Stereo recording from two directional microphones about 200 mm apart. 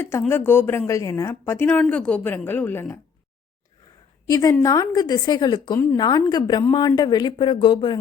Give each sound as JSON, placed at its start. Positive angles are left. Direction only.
{"t": 0.0, "sound": "a woman's voice", "side_deg": 10}
{"t": 4.3, "sound": "a woman's voice", "side_deg": 15}